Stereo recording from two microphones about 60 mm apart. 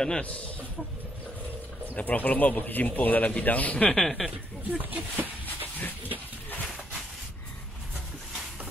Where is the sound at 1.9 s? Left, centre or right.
Left.